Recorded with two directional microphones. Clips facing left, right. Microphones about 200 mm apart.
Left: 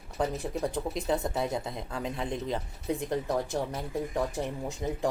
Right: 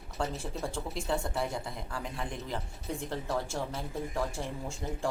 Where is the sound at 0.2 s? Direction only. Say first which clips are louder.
Left 5 dB; 20° left (ahead or behind).